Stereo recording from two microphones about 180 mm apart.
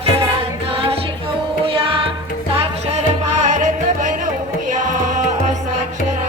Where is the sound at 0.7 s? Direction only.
30° right (ahead or behind).